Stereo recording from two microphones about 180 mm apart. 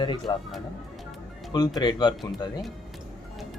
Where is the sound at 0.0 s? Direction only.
25° left (ahead or behind).